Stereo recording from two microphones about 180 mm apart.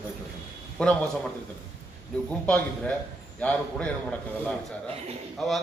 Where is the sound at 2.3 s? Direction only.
5° left (ahead or behind).